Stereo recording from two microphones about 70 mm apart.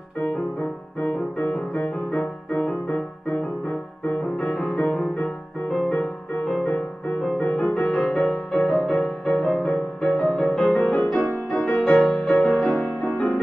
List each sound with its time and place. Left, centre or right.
1.0 s music: centre
5.9 s music: centre